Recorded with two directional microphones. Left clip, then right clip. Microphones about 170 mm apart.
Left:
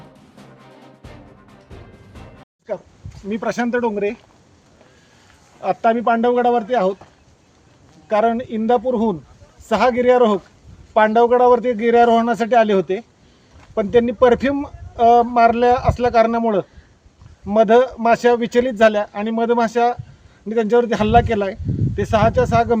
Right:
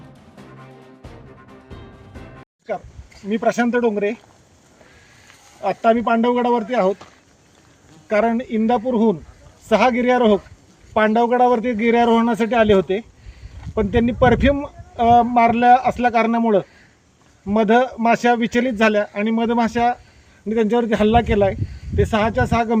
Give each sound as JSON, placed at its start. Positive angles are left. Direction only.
{"t": 3.2, "sound": "speech", "side_deg": 15}
{"t": 5.6, "sound": "speech", "side_deg": 20}
{"t": 8.1, "sound": "speech", "side_deg": -5}
{"t": 8.4, "sound": "speech", "side_deg": 15}